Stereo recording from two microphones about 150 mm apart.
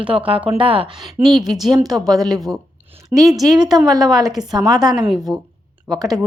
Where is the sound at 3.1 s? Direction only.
25° right (ahead or behind).